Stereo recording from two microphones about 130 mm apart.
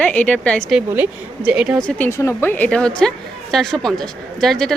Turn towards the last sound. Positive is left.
turn(degrees=0)  # may be behind; listen again after turning